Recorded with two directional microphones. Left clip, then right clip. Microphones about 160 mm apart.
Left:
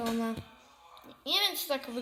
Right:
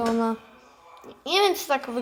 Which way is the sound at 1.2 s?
30° right (ahead or behind).